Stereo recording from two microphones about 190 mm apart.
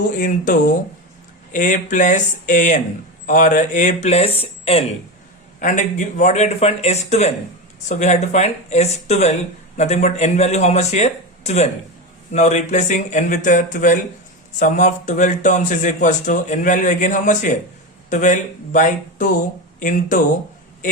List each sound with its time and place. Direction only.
0.2 s a man's voice: 45° left (ahead or behind)
5.5 s a man's voice: 40° left (ahead or behind)